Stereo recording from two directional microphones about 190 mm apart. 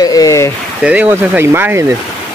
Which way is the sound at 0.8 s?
5° right (ahead or behind).